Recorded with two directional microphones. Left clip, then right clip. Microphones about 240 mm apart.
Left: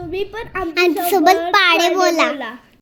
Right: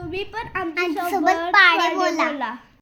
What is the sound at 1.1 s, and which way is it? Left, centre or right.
A child's voice, left.